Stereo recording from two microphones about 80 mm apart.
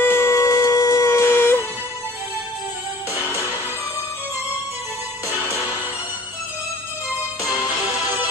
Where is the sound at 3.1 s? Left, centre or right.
Left.